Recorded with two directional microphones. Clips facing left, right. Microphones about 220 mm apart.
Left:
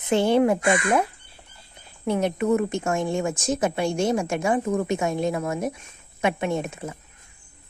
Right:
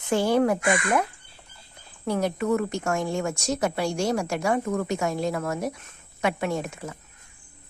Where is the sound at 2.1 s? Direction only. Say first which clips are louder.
Left 2 dB; 20° left (ahead or behind).